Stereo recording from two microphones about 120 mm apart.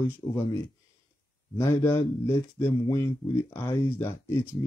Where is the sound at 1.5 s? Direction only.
20° left (ahead or behind).